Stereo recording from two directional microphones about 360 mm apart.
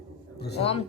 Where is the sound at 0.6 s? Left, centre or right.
Centre.